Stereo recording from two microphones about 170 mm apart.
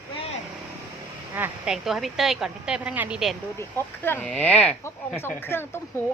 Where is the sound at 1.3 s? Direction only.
5° right (ahead or behind).